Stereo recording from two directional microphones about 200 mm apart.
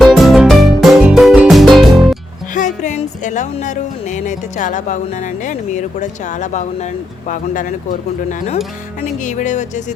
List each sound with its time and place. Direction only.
0.0 s music: centre (ahead or behind)
2.6 s speech: 40° left (ahead or behind)